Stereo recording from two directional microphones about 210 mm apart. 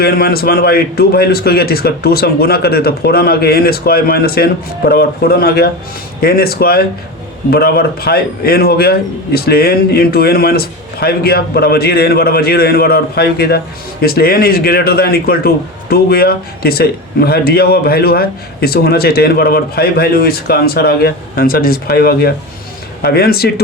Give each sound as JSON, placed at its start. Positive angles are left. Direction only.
{"t": 0.0, "sound": "speech", "side_deg": 45}